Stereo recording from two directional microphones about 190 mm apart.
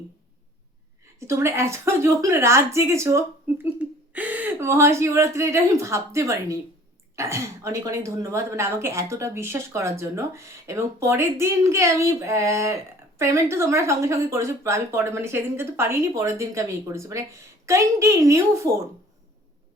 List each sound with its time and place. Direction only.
1.2 s speech: 15° right (ahead or behind)